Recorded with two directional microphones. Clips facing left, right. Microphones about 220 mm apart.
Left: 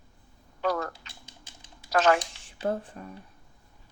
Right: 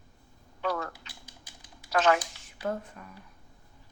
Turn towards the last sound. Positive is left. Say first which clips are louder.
# left 3 dB
turn(degrees=30)  # may be behind; listen again after turning